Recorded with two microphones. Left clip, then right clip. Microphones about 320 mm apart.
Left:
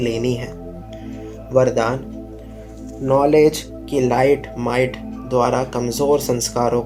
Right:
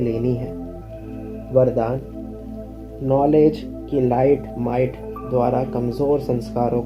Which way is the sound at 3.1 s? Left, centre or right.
Left.